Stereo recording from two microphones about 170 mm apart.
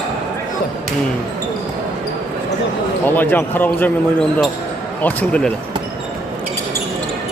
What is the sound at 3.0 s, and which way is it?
Speech, 10° left (ahead or behind).